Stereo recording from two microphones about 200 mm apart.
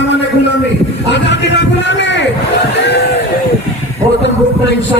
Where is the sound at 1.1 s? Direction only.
60° left (ahead or behind).